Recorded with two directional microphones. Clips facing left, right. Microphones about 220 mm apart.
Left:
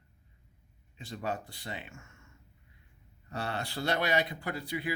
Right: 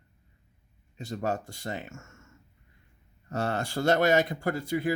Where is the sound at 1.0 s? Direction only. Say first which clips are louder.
Right 5 dB; 45° right (ahead or behind).